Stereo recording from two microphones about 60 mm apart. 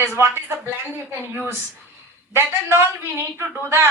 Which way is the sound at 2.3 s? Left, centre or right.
Right.